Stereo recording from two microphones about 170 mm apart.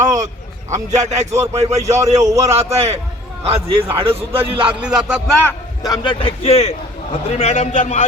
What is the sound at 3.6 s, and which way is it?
Speech, 30° right (ahead or behind).